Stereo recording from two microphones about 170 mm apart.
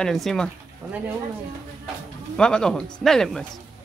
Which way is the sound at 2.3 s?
5° left (ahead or behind).